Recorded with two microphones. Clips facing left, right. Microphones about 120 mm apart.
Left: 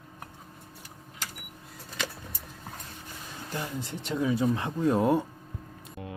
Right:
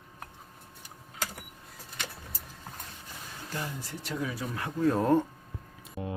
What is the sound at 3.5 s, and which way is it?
Speech, 20° left (ahead or behind).